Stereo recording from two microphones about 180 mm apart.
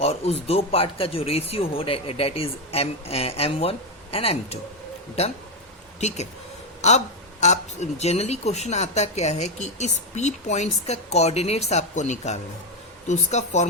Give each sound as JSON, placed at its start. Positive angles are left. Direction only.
{"t": 0.0, "sound": "speech", "side_deg": 35}
{"t": 7.4, "sound": "speech", "side_deg": 40}